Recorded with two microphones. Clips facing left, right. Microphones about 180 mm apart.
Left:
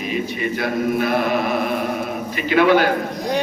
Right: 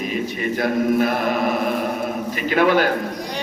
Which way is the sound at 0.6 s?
45° right (ahead or behind).